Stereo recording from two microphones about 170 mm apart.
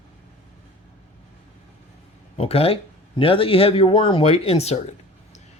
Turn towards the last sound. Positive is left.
turn(degrees=35)  # may be behind; listen again after turning